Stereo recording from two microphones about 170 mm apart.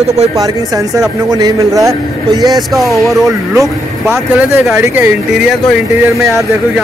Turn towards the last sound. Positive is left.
turn(degrees=-10)  # may be behind; listen again after turning